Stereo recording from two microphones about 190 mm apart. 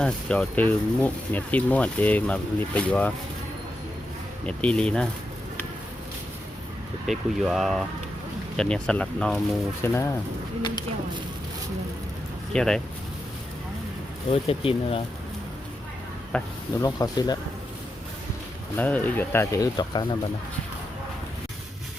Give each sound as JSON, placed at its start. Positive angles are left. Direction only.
{"t": 0.0, "sound": "speech", "side_deg": 5}
{"t": 4.4, "sound": "speech", "side_deg": 5}
{"t": 7.1, "sound": "speech", "side_deg": 0}
{"t": 12.5, "sound": "speech", "side_deg": 5}
{"t": 14.3, "sound": "speech", "side_deg": 30}
{"t": 16.3, "sound": "speech", "side_deg": 5}
{"t": 16.8, "sound": "speech", "side_deg": 20}
{"t": 18.8, "sound": "speech", "side_deg": 10}